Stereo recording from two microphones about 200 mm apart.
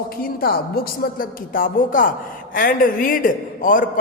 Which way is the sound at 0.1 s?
50° left (ahead or behind).